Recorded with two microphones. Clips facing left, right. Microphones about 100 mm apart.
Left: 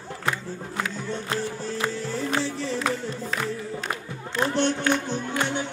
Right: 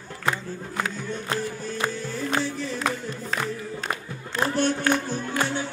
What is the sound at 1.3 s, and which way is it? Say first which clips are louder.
Music: even; 30° left (ahead or behind).